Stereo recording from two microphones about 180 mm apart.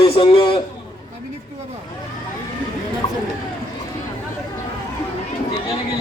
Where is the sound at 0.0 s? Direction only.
30° left (ahead or behind).